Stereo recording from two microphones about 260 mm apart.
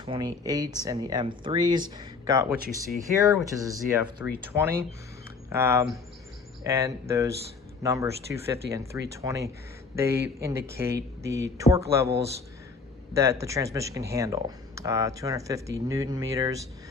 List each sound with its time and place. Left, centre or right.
0.0 s speech: centre
13.1 s speech: centre